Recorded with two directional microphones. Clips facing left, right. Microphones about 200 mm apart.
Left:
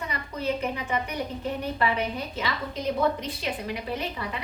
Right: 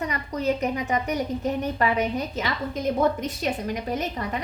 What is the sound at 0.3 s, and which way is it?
A woman's voice, 40° right (ahead or behind).